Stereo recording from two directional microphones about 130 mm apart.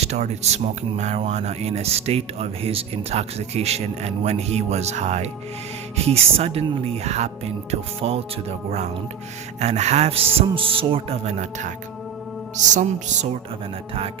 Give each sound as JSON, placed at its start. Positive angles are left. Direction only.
{"t": 0.0, "sound": "speech", "side_deg": -55}
{"t": 12.6, "sound": "music", "side_deg": -70}